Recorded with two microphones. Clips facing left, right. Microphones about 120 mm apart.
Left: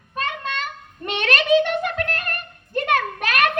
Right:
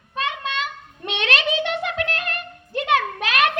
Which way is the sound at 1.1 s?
45° left (ahead or behind).